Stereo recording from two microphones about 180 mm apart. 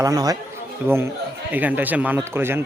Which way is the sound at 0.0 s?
20° right (ahead or behind).